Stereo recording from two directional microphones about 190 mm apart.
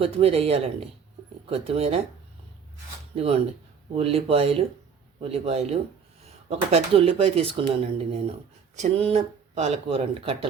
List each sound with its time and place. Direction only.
0.0 s speech: 30° right (ahead or behind)
3.2 s speech: 30° right (ahead or behind)
8.7 s speech: 35° right (ahead or behind)